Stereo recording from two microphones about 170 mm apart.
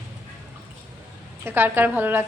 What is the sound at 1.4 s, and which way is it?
Speech, 10° right (ahead or behind).